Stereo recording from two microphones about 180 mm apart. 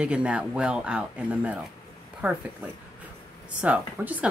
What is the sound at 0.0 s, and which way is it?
Speech, 5° right (ahead or behind).